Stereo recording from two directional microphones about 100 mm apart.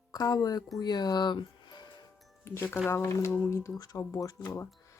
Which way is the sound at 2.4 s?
25° left (ahead or behind).